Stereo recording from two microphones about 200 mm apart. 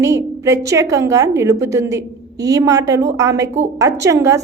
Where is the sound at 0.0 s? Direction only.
15° right (ahead or behind).